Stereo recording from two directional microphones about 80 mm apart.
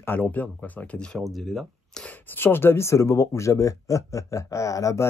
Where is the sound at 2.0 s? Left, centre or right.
Left.